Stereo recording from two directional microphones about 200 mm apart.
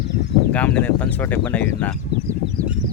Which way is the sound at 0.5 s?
5° left (ahead or behind).